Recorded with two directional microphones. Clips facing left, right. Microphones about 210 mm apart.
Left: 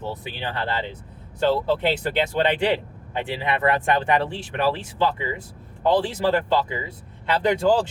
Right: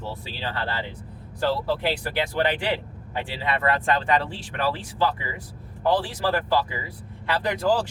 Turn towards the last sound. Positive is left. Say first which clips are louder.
# left 4 dB
turn(degrees=25)  # may be behind; listen again after turning